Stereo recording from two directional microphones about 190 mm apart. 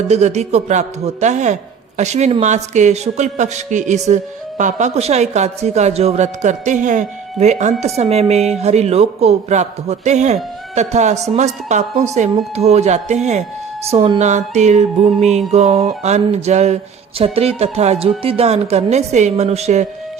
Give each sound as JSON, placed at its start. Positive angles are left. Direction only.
{"t": 0.1, "sound": "a man's voice", "side_deg": -35}